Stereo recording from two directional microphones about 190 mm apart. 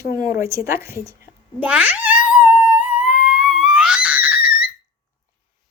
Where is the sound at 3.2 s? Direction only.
5° right (ahead or behind).